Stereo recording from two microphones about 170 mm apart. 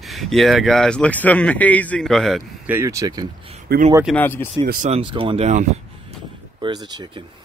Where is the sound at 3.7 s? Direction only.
70° right (ahead or behind).